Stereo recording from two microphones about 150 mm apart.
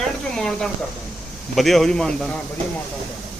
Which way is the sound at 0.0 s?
5° left (ahead or behind).